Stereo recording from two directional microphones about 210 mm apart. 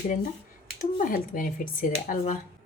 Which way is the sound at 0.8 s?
40° left (ahead or behind).